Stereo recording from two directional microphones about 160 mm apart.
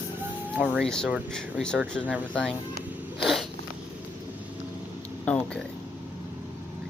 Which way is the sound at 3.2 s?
Centre (ahead or behind).